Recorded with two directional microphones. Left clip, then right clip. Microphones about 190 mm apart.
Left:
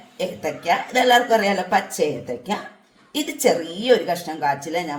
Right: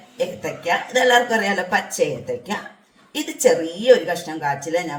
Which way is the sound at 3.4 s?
35° left (ahead or behind).